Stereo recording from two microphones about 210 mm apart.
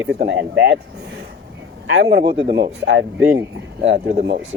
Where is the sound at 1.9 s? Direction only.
60° right (ahead or behind).